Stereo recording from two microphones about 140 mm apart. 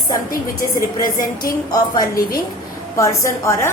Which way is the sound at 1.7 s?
25° left (ahead or behind).